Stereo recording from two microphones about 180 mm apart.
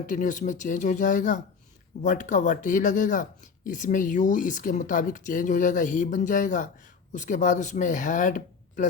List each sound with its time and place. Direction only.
0.0 s speech: 45° left (ahead or behind)